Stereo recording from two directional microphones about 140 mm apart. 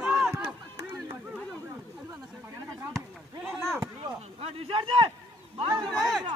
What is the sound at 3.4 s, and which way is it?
Speech, centre (ahead or behind).